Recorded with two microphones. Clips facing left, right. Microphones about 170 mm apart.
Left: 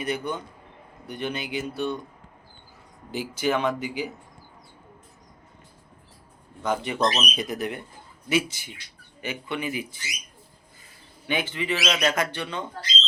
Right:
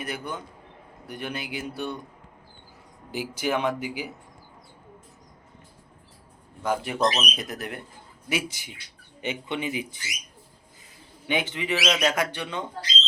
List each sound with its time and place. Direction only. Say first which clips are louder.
0.0 s speech: left 4 dB; 5° right (ahead or behind)
3.1 s speech: left 2 dB; 10° right (ahead or behind)
6.6 s speech: even; 5° right (ahead or behind)
8.3 s speech: left 4 dB; 15° right (ahead or behind)
11.3 s speech: even; 20° right (ahead or behind)